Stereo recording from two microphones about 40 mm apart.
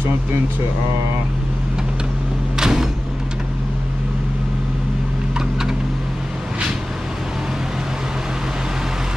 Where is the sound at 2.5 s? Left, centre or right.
Centre.